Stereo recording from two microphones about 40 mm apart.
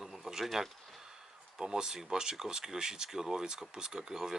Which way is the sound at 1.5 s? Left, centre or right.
Centre.